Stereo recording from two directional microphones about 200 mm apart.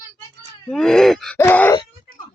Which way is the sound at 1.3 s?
10° left (ahead or behind).